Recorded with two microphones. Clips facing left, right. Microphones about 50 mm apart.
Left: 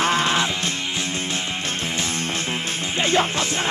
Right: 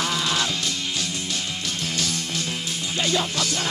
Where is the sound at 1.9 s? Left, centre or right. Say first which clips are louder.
Left 3 dB; left.